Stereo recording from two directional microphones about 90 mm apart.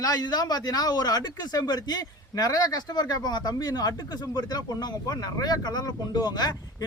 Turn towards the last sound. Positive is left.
turn(degrees=50)  # may be behind; listen again after turning